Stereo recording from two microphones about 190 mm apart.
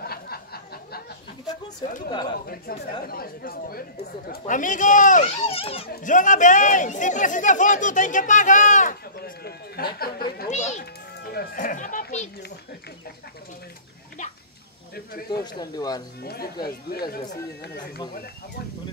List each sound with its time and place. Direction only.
0.0 s a sound: 55° left (ahead or behind)
2.0 s speech: 20° left (ahead or behind)
2.4 s speech: 50° left (ahead or behind); by 5.9 s 30° left (ahead or behind)
5.9 s speech: 40° left (ahead or behind)
10.5 s speech: 40° left (ahead or behind)
11.2 s speech: 50° left (ahead or behind)
15.3 s speech: 20° left (ahead or behind)
16.2 s speech: 55° left (ahead or behind)